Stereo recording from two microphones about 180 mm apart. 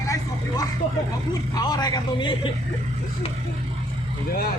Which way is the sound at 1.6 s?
20° left (ahead or behind).